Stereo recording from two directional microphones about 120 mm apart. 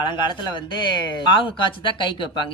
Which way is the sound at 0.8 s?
40° left (ahead or behind).